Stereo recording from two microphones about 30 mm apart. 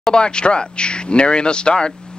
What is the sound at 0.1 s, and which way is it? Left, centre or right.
Speech, left.